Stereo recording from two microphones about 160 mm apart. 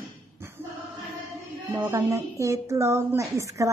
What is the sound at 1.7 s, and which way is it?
A woman's voice, 15° right (ahead or behind).